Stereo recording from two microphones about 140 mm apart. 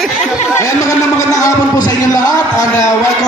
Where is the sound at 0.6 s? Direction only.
25° left (ahead or behind).